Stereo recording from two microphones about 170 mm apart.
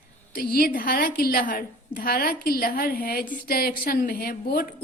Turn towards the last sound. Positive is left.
turn(degrees=60)  # may be behind; listen again after turning